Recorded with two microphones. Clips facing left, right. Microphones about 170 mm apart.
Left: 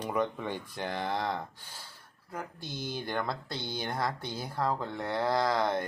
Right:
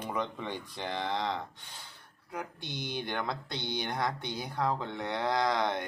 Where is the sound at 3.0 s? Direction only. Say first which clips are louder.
Left 3 dB; 5° left (ahead or behind).